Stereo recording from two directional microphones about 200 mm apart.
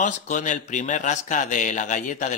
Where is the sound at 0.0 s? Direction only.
40° left (ahead or behind).